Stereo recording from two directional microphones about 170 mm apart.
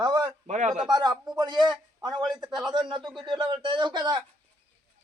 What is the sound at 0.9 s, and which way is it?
Speech, 25° right (ahead or behind).